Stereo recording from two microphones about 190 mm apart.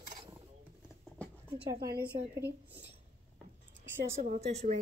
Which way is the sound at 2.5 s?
60° right (ahead or behind).